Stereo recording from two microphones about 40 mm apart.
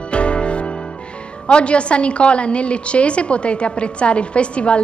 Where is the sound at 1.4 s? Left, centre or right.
Left.